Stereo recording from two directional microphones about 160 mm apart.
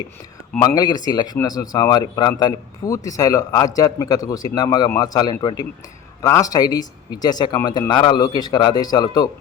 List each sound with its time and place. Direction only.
0.6 s speech: 25° left (ahead or behind)